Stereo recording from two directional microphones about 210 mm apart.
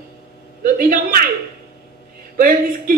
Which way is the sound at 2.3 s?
45° right (ahead or behind).